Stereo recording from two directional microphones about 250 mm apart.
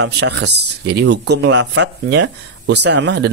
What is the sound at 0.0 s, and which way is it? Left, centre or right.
Speech, right.